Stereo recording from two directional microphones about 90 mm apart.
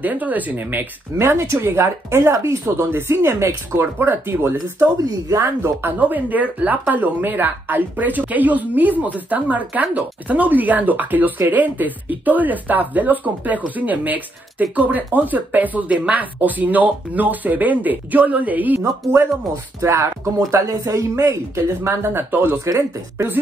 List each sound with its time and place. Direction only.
0.0 s speech: 20° right (ahead or behind)
4.6 s speech: 40° right (ahead or behind); by 18.8 s 20° right (ahead or behind)
19.8 s speech: 30° right (ahead or behind)